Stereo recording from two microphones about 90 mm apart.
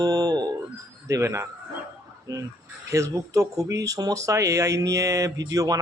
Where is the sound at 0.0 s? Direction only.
40° right (ahead or behind).